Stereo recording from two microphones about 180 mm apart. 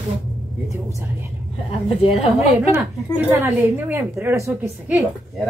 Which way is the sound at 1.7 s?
30° left (ahead or behind).